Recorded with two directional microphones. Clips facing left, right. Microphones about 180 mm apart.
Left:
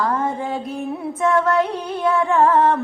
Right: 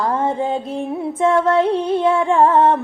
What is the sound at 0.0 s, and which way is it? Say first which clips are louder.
Music: right 3 dB; 30° right (ahead or behind).